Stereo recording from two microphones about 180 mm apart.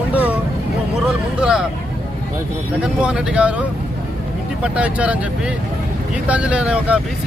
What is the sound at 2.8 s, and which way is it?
Speech, 5° right (ahead or behind).